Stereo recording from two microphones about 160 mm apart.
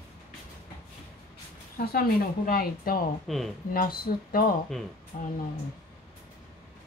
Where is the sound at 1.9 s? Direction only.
70° left (ahead or behind).